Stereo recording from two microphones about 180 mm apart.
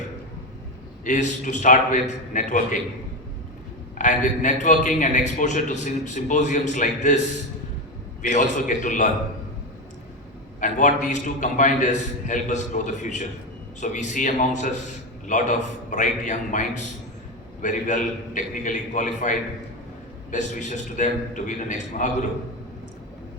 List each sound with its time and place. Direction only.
1.0 s a man's voice: 45° left (ahead or behind)
3.9 s a man's voice: 45° left (ahead or behind)
8.4 s a man's voice: 45° left (ahead or behind)
10.6 s a man's voice: 45° left (ahead or behind)